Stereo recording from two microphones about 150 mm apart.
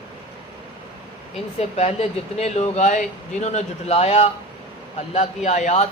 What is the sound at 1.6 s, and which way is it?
Speech, 45° left (ahead or behind).